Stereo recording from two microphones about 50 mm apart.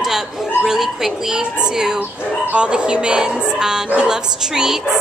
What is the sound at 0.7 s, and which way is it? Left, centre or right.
Speech, centre.